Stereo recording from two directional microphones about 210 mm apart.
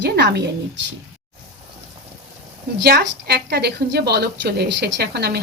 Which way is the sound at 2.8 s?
50° right (ahead or behind).